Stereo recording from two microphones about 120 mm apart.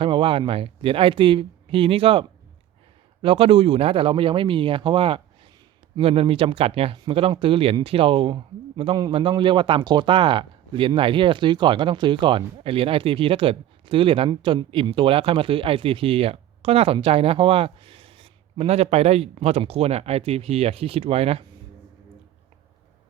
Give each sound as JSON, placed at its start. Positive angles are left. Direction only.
{"t": 0.0, "sound": "a man's voice", "side_deg": -45}